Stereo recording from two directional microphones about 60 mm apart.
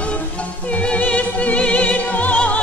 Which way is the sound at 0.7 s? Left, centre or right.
Left.